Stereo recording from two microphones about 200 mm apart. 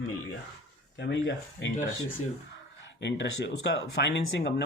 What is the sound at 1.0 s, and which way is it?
Speech, 60° left (ahead or behind).